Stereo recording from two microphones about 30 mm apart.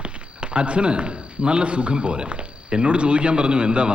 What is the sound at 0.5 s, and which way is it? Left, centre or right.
Speech, right.